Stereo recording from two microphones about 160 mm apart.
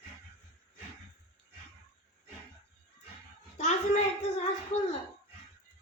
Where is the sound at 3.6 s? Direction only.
45° left (ahead or behind).